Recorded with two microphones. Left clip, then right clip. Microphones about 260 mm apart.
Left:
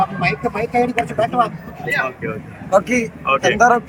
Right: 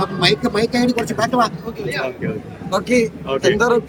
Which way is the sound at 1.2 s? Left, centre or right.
Right.